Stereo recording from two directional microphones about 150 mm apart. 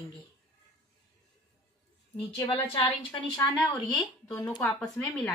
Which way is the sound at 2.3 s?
35° left (ahead or behind).